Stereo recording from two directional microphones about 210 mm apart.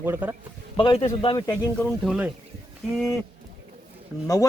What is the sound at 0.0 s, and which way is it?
Speech, 10° right (ahead or behind).